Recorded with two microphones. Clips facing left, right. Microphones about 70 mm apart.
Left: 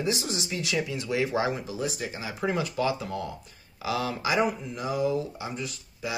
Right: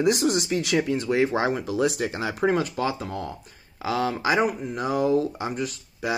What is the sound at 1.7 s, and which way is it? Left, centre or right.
Speech, right.